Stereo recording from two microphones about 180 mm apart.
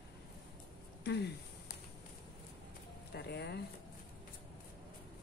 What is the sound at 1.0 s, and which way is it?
Speech, 70° left (ahead or behind).